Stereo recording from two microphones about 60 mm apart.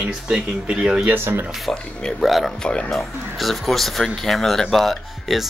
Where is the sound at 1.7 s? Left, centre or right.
Centre.